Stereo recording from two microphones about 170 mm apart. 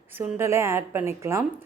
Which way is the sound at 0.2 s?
15° right (ahead or behind).